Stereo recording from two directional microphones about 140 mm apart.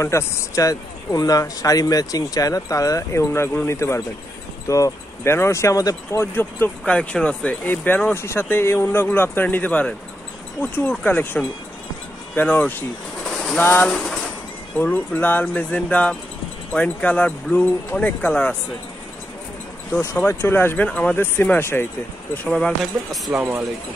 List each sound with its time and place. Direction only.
0.0 s speech: 20° left (ahead or behind)
6.8 s speech: 5° left (ahead or behind)
13.9 s a sound: centre (ahead or behind)
14.8 s speech: 15° left (ahead or behind)
19.9 s speech: 15° left (ahead or behind); by 23.4 s centre (ahead or behind)